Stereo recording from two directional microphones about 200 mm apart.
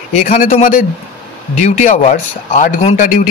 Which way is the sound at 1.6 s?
35° left (ahead or behind).